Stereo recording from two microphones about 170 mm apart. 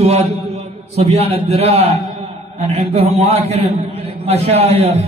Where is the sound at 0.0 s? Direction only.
35° right (ahead or behind).